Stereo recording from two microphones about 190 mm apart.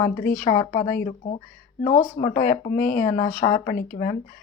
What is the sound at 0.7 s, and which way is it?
Speech, 45° left (ahead or behind).